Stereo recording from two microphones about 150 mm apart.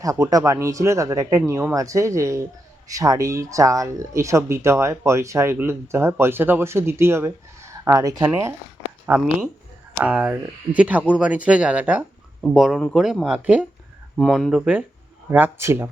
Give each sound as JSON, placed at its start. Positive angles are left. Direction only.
{"t": 0.0, "sound": "speech", "side_deg": -20}